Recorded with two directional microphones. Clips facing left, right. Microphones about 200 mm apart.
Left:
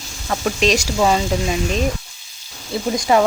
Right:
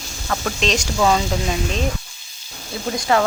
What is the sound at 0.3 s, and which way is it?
Speech, 15° left (ahead or behind).